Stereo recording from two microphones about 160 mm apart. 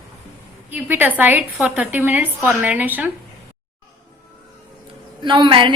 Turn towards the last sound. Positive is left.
turn(degrees=-30)  # may be behind; listen again after turning